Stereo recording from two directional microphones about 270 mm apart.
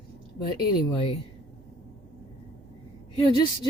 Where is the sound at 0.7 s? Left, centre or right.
Centre.